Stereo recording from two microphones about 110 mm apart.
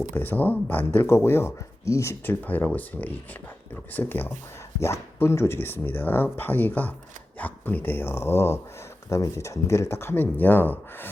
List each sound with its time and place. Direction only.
0.1 s speech: 15° left (ahead or behind)
2.4 s speech: 15° left (ahead or behind)